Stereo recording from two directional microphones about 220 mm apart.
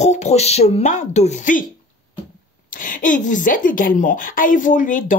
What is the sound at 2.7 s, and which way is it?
A woman's voice, 40° left (ahead or behind).